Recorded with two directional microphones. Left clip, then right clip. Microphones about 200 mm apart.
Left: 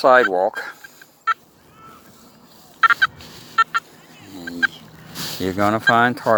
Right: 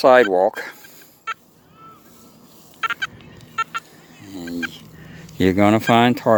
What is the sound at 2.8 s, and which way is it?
Fowl, 45° left (ahead or behind).